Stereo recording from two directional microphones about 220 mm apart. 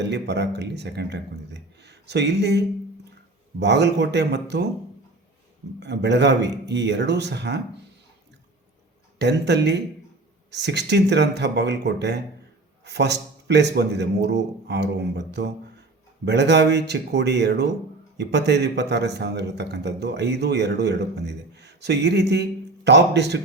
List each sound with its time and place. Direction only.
0.0 s a man's voice: 50° right (ahead or behind)
5.8 s a man's voice: 50° right (ahead or behind)
9.1 s a man's voice: 50° right (ahead or behind)